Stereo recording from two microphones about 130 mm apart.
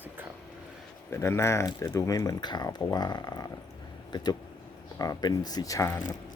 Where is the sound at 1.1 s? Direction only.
20° left (ahead or behind).